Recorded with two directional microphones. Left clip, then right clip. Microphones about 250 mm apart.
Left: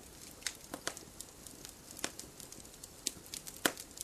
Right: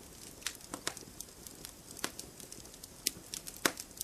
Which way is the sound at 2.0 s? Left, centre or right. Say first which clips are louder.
Right 1 dB; centre.